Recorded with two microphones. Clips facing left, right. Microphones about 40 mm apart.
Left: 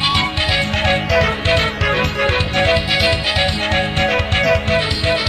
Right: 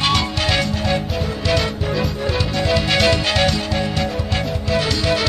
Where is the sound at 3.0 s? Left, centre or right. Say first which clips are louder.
Even; centre.